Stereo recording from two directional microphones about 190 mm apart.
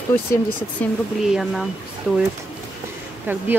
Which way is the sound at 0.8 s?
Centre (ahead or behind).